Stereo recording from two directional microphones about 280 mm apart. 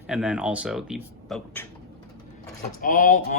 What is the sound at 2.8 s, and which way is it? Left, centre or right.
Speech, left.